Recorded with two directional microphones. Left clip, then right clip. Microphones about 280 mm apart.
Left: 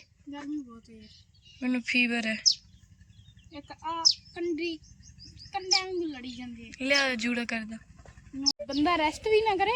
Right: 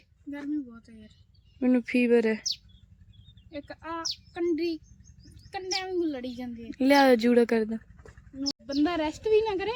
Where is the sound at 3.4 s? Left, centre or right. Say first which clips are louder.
Left 1 dB; centre.